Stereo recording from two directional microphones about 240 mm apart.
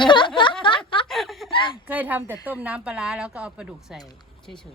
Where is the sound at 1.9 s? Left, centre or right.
Centre.